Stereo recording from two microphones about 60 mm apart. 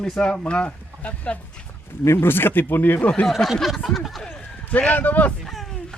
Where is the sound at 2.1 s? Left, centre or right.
Left.